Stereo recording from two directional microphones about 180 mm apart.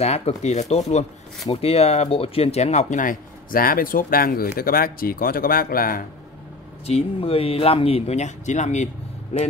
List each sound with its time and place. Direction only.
0.0 s speech: 35° left (ahead or behind); by 6.0 s 55° left (ahead or behind)
6.9 s speech: 30° left (ahead or behind)